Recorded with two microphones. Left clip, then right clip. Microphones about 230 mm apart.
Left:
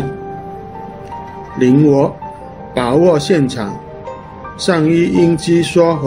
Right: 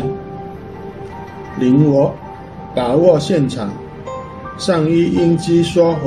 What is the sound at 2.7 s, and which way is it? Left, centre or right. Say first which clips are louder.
Speech: even; left.